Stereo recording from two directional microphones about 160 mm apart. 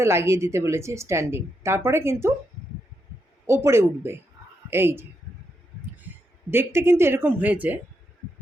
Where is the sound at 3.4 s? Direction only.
15° right (ahead or behind).